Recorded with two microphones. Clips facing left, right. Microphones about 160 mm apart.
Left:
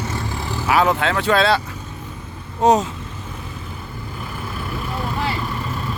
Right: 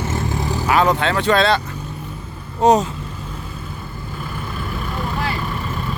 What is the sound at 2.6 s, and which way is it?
Speech, centre (ahead or behind).